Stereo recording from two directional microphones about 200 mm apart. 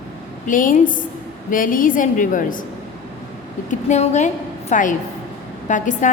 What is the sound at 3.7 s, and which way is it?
A woman's voice, 35° left (ahead or behind).